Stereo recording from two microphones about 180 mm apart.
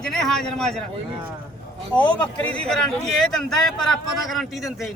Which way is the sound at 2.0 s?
5° left (ahead or behind).